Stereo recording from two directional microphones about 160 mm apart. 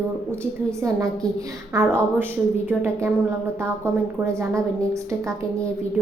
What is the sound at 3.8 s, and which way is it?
A woman's voice, 20° right (ahead or behind).